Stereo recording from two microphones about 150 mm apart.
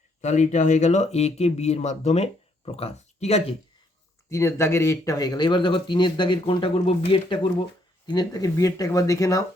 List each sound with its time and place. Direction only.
0.2 s speech: 50° left (ahead or behind)
4.3 s speech: 15° left (ahead or behind)